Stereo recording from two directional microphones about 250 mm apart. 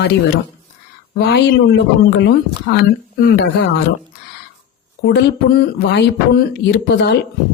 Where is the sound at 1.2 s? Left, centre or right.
Left.